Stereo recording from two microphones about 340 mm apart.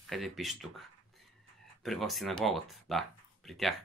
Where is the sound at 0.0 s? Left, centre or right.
Centre.